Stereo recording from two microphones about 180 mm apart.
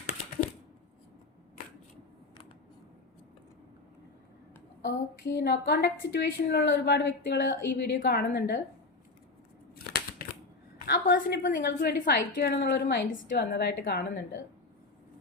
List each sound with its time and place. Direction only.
4.8 s a woman's voice: 80° left
8.0 s a woman's voice: 65° left (ahead or behind)
9.7 s a sound: 55° left (ahead or behind)
10.8 s a woman's voice: 60° left (ahead or behind)
11.6 s a woman's voice: 70° left (ahead or behind)